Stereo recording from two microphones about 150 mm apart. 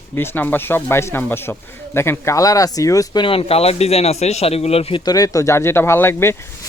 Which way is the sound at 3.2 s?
40° left (ahead or behind).